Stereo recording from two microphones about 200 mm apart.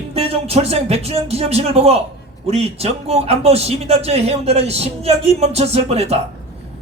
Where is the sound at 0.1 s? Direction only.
30° right (ahead or behind).